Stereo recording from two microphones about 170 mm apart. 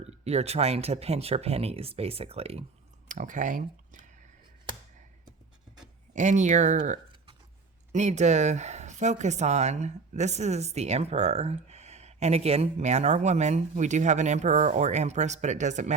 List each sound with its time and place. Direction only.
0.0 s speech: 40° right (ahead or behind)
3.1 s speech: 50° right (ahead or behind)
6.1 s speech: 45° right (ahead or behind)